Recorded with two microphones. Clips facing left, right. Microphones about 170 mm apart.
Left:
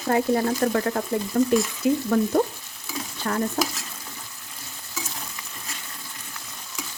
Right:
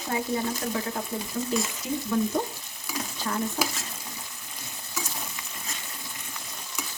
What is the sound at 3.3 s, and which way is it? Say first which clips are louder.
Frying: left 5 dB; 60° left (ahead or behind).